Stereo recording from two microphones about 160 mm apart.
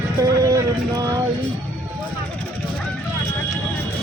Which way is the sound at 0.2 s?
20° right (ahead or behind).